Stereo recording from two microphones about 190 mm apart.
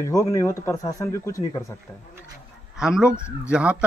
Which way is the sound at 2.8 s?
5° right (ahead or behind).